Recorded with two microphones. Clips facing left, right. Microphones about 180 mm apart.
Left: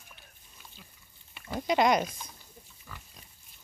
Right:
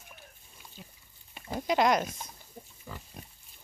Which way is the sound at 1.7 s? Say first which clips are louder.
Left 1 dB; centre (ahead or behind).